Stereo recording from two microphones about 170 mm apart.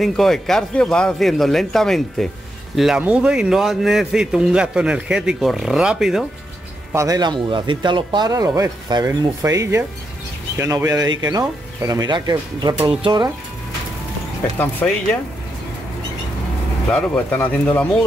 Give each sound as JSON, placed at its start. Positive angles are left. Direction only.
{"t": 0.0, "sound": "speech", "side_deg": 0}
{"t": 6.9, "sound": "speech", "side_deg": -20}
{"t": 14.8, "sound": "speech", "side_deg": 5}
{"t": 16.9, "sound": "speech", "side_deg": 10}